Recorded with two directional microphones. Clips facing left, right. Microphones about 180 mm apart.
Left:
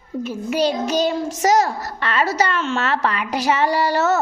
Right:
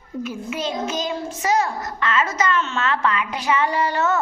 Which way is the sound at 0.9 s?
35° left (ahead or behind).